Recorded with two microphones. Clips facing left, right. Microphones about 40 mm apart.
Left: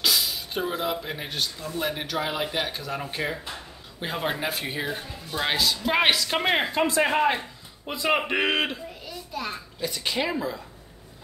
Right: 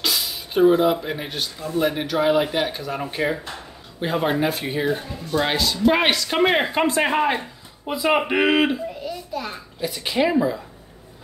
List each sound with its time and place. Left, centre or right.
0.0 s speech: centre
6.7 s speech: right
7.1 s speech: centre